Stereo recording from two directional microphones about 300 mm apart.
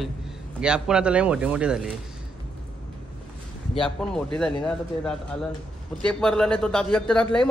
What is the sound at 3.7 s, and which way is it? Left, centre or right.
Speech, centre.